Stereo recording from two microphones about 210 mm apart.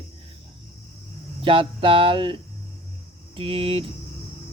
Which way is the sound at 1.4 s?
25° right (ahead or behind).